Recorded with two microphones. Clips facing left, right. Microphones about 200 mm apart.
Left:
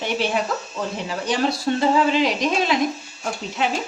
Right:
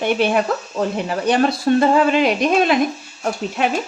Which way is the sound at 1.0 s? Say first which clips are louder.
Right 4 dB; 60° right (ahead or behind).